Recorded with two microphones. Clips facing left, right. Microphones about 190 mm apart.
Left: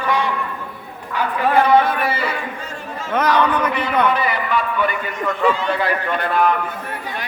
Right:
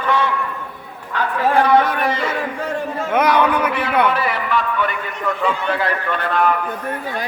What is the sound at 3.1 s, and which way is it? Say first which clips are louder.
A man's voice: right 1 dB; 10° right (ahead or behind).